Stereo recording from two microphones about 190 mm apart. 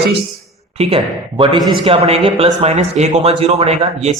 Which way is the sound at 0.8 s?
30° right (ahead or behind).